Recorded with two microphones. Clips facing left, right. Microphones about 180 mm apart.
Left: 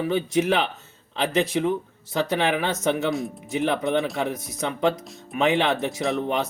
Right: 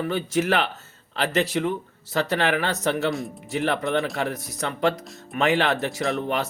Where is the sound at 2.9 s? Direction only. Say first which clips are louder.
Even; centre (ahead or behind).